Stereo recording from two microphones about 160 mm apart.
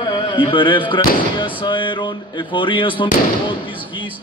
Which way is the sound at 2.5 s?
30° left (ahead or behind).